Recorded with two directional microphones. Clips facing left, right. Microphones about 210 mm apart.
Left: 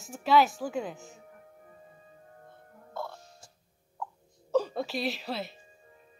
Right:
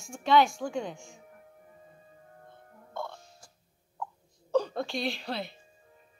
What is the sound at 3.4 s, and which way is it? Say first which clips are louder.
Cough: left 1 dB; 25° left (ahead or behind).